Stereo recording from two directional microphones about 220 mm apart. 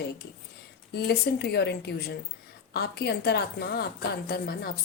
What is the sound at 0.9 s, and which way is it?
A woman's voice, 45° left (ahead or behind).